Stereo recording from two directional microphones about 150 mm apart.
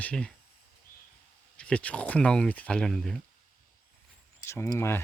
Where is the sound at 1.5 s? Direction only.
10° left (ahead or behind).